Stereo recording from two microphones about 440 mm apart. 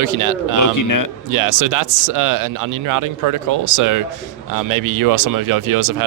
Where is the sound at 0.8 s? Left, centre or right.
Left.